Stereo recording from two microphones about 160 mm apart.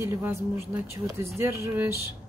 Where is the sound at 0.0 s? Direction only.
15° right (ahead or behind).